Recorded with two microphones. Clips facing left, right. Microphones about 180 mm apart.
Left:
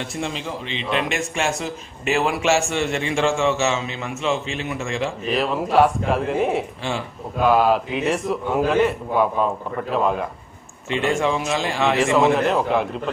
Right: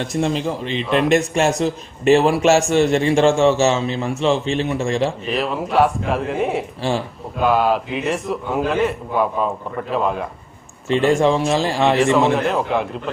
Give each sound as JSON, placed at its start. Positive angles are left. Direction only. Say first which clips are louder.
{"t": 0.1, "sound": "a man's voice", "louder": "right 7 dB", "side_deg": -40}
{"t": 0.8, "sound": "a man's voice", "louder": "right 5 dB", "side_deg": 0}
{"t": 1.1, "sound": "a man's voice", "louder": "right 8 dB", "side_deg": -40}
{"t": 5.3, "sound": "a man's voice", "louder": "left 5 dB", "side_deg": 0}
{"t": 11.1, "sound": "a man's voice", "louder": "right 5 dB", "side_deg": -35}
{"t": 12.0, "sound": "a man's voice", "louder": "left 2 dB", "side_deg": 0}